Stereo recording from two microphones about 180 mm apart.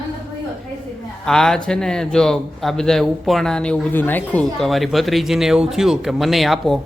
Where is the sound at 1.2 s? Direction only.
5° left (ahead or behind).